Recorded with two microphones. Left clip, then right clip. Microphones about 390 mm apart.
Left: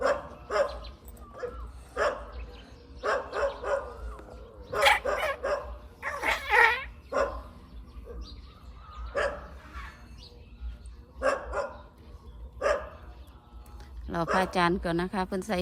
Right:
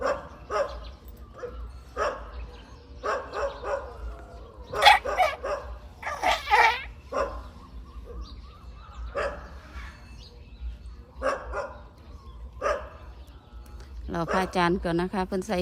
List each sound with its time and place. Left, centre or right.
0.0 s dog: left
1.4 s bow-wow: left
2.0 s dog: left
6.0 s dog: centre
7.1 s dog: left
9.1 s dog: left
11.2 s dog: left
14.3 s a woman's voice: centre